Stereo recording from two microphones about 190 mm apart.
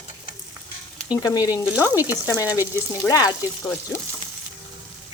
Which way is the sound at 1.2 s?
20° left (ahead or behind).